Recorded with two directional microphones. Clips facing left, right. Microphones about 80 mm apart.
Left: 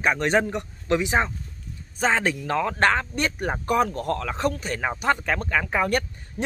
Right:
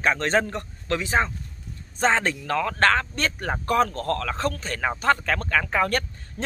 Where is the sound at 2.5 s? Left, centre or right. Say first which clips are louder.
Right 1 dB; centre.